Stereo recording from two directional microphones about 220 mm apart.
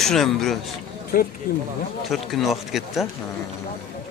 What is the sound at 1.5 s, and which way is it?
Speech, 40° left (ahead or behind).